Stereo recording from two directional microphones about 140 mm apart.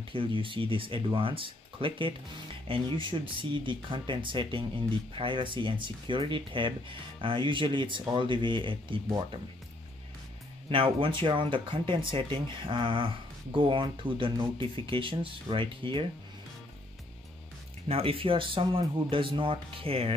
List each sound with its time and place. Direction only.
0.1 s speech: 40° right (ahead or behind)
10.7 s speech: 40° right (ahead or behind)
17.8 s speech: 40° right (ahead or behind)